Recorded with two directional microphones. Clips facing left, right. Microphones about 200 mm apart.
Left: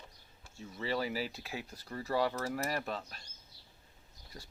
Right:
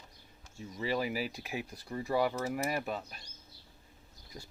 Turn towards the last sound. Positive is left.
turn(degrees=-10)  # may be behind; listen again after turning